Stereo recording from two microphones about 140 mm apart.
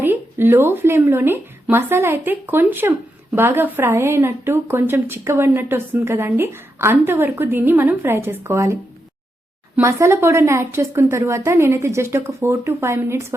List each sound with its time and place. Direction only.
0.0 s a woman's voice: 15° right (ahead or behind)